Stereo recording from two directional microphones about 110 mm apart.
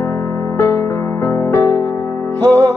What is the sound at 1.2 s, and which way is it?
Music, 20° left (ahead or behind).